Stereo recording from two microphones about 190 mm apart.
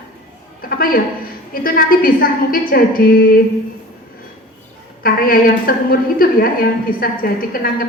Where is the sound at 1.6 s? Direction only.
50° left (ahead or behind).